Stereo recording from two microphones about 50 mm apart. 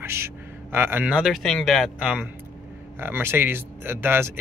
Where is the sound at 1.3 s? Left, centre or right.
Centre.